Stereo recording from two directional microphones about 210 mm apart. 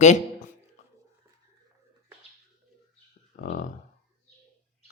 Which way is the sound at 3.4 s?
40° left (ahead or behind).